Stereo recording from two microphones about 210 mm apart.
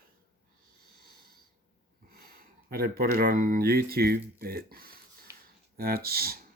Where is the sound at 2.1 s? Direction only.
45° right (ahead or behind).